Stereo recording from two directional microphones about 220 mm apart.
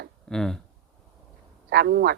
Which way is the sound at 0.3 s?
Centre (ahead or behind).